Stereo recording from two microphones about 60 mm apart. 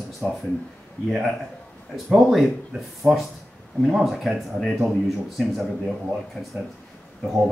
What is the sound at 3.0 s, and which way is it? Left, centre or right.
Speech, centre.